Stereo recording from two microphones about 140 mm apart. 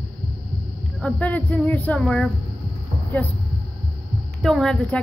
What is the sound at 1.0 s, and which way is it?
A woman's voice, 10° left (ahead or behind).